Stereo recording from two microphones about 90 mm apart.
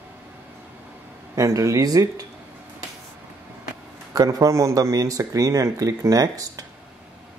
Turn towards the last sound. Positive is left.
turn(degrees=-45)  # may be behind; listen again after turning